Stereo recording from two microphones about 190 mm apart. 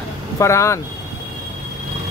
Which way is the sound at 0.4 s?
15° left (ahead or behind).